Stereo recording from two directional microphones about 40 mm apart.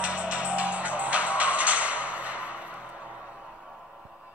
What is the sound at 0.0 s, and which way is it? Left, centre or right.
Music, right.